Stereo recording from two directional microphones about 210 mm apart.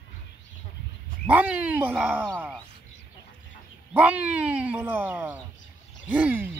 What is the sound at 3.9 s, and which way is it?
A man's voice, 5° right (ahead or behind).